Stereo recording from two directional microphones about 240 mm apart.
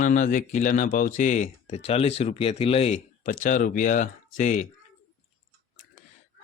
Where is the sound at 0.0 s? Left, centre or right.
Left.